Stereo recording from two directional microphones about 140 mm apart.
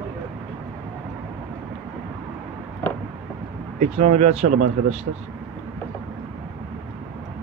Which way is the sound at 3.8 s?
50° right (ahead or behind).